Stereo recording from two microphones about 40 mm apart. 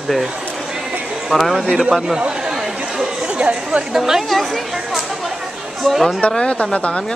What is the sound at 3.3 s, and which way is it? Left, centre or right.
Speech, right.